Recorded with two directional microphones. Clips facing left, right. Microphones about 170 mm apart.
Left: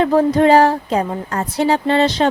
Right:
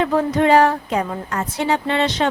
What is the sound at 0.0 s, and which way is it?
Speech, 35° left (ahead or behind).